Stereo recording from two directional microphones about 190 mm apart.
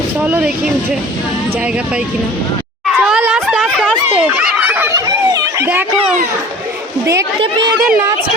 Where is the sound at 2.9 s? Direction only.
5° right (ahead or behind).